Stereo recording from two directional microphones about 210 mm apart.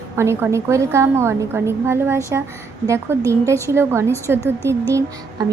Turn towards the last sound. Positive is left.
turn(degrees=-15)  # may be behind; listen again after turning